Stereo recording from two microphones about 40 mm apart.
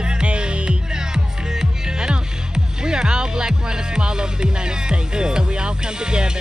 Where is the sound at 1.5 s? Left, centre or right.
Centre.